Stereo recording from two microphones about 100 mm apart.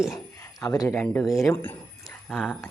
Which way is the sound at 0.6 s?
35° left (ahead or behind).